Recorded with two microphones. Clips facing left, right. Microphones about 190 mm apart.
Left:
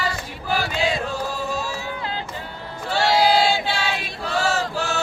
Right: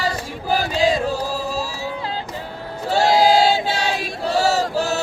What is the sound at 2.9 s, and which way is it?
Choir, 40° right (ahead or behind).